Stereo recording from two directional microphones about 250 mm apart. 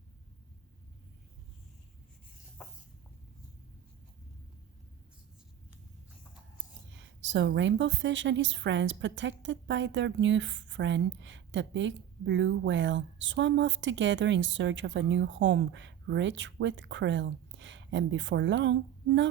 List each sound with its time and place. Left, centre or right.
6.9 s a woman's voice: right